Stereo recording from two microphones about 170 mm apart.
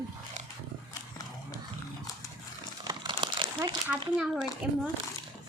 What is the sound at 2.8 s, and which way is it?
Crumpling, 25° right (ahead or behind).